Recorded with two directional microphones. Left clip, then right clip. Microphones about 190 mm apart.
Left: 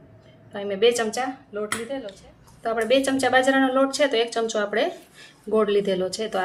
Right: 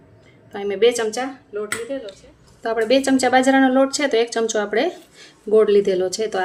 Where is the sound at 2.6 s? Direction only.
45° right (ahead or behind).